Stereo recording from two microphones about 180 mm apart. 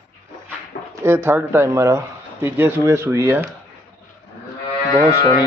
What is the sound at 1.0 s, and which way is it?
Speech, 15° right (ahead or behind).